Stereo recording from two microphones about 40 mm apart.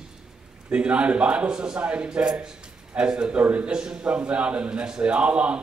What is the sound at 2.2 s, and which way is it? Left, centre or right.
A man's voice, centre.